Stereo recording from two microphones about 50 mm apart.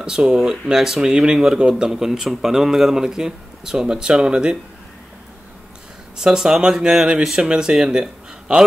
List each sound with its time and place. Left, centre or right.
0.0 s speech: centre
6.1 s speech: centre